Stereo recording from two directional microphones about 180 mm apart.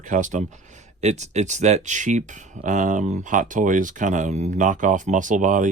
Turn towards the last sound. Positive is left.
turn(degrees=-45)  # may be behind; listen again after turning